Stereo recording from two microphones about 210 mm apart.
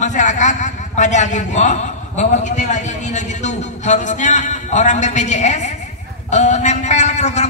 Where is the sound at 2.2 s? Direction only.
35° left (ahead or behind).